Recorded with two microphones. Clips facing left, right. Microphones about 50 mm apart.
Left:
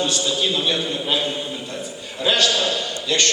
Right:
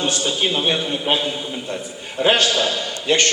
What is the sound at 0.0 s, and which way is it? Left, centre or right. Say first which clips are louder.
A man's voice: right 1 dB; right.